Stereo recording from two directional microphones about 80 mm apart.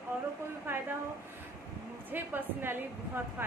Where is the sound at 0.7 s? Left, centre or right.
Right.